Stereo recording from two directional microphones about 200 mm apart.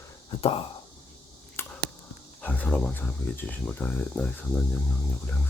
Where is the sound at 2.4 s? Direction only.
5° left (ahead or behind).